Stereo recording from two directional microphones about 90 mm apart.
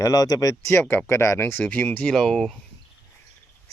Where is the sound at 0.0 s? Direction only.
40° left (ahead or behind).